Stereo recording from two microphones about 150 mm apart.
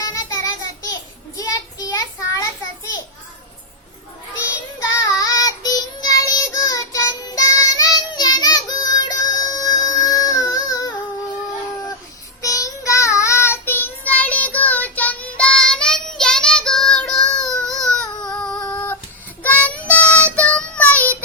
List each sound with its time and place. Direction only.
0.0 s child singing: 25° left (ahead or behind)
4.8 s child singing: 20° left (ahead or behind)
12.4 s child singing: 20° left (ahead or behind)